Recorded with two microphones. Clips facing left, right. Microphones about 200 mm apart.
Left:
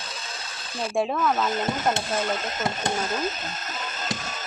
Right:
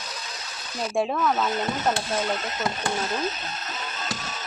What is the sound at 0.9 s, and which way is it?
Speech, centre (ahead or behind).